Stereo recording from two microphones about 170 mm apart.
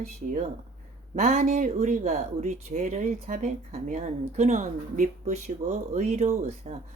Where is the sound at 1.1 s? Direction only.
45° right (ahead or behind).